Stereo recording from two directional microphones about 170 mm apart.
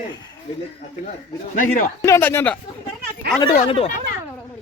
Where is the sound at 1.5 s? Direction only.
50° left (ahead or behind).